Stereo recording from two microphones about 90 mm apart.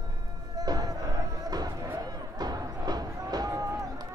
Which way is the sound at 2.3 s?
45° right (ahead or behind).